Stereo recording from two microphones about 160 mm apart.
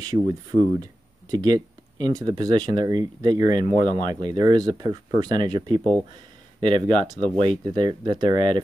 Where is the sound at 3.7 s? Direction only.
50° left (ahead or behind).